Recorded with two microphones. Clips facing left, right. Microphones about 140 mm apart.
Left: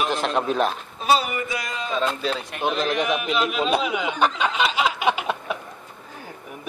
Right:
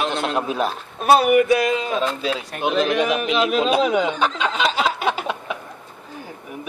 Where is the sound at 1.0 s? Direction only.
60° right (ahead or behind).